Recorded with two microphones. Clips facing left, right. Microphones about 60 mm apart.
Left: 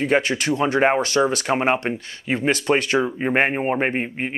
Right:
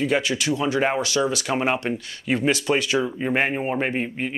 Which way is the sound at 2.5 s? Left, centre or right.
Left.